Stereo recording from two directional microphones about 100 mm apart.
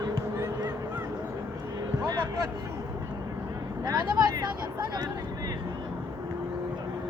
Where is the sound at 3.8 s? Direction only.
40° right (ahead or behind).